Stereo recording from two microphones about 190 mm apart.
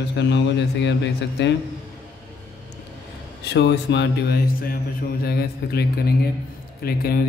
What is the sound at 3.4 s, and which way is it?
Speech, 65° left (ahead or behind).